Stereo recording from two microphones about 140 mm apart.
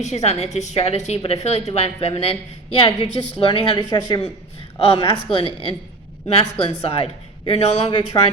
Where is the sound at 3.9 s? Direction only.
30° left (ahead or behind).